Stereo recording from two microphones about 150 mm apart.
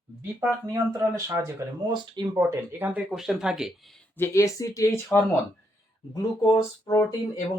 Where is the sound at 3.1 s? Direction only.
Centre (ahead or behind); by 4.9 s 20° left (ahead or behind).